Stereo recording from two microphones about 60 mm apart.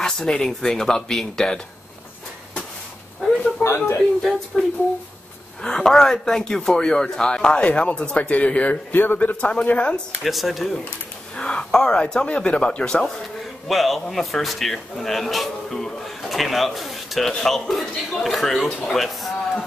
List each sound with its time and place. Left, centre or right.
0.3 s speech: centre
3.6 s a man's voice: left
4.5 s speech: centre
10.2 s a man's voice: centre
11.3 s speech: centre
13.7 s a man's voice: centre